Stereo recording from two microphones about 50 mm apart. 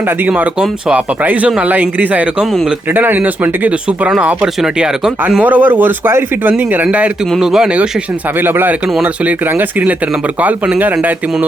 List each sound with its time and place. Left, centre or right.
1.2 s speech: right
4.6 s speech: centre
5.4 s speech: right
6.1 s speech: right
6.5 s speech: right
6.8 s speech: right
7.3 s speech: centre
8.4 s speech: right